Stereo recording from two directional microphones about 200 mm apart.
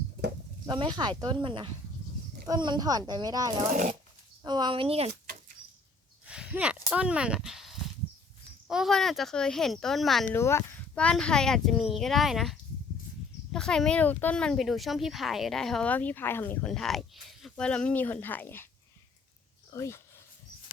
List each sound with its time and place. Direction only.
0.7 s speech: 20° right (ahead or behind)
3.7 s speech: 40° right (ahead or behind)
4.4 s speech: 20° right (ahead or behind)
6.2 s a sound: 5° right (ahead or behind)
6.9 s speech: 5° right (ahead or behind)
10.3 s speech: 10° left (ahead or behind)
19.7 s speech: 15° left (ahead or behind)